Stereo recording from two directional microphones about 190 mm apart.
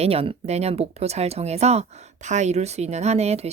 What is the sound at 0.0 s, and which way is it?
A woman's voice, 30° right (ahead or behind).